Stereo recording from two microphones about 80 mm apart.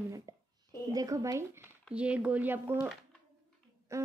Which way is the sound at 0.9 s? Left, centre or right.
Right.